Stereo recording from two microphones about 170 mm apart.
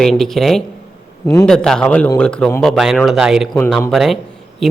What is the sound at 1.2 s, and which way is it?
Speech, 20° left (ahead or behind).